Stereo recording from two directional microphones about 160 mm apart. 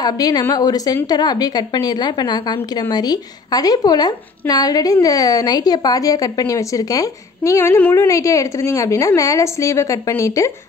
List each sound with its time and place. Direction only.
0.0 s a woman's voice: 25° left (ahead or behind)